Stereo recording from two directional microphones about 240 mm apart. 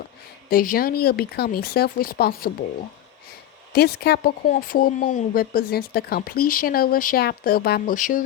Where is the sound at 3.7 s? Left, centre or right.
Left.